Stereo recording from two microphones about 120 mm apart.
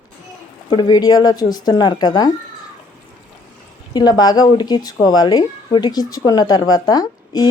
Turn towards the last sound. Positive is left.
turn(degrees=35)  # may be behind; listen again after turning